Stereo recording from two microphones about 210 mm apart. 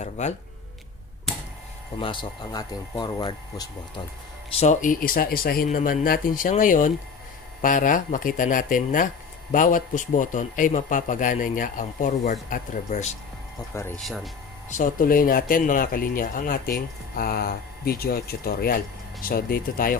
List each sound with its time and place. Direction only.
0.0 s a man's voice: 35° left (ahead or behind)
2.0 s speech: 25° left (ahead or behind)
4.6 s a man's voice: 35° left (ahead or behind)
13.7 s speech: 10° left (ahead or behind)
14.0 s speech: centre (ahead or behind)
14.7 s speech: 40° left (ahead or behind)